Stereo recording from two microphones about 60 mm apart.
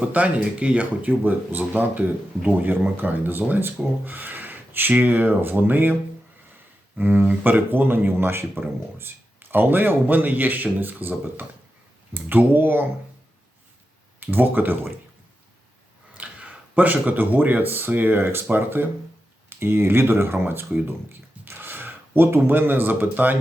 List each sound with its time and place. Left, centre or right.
0.0 s speech: right
14.2 s speech: right
16.1 s speech: centre